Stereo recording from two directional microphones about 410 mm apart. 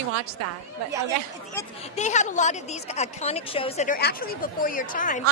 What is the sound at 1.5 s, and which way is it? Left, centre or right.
A woman's voice, centre.